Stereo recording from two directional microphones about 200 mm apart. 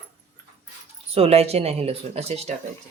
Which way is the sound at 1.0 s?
30° right (ahead or behind).